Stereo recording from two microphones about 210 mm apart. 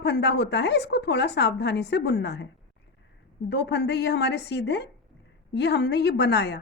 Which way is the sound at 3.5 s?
55° left (ahead or behind).